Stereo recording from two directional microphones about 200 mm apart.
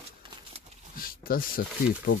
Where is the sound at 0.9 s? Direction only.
45° left (ahead or behind).